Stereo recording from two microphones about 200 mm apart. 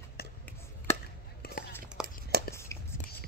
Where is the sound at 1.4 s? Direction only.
50° left (ahead or behind).